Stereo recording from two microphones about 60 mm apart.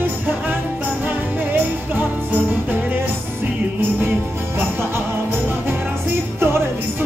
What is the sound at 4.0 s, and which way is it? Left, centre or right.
Jingle bell, right.